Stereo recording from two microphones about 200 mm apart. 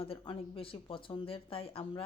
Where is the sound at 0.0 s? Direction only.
30° left (ahead or behind).